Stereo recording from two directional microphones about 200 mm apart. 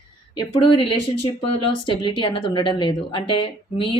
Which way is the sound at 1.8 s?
25° left (ahead or behind).